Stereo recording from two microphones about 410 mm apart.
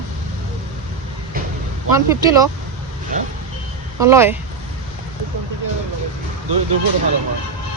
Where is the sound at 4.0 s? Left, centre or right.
Centre.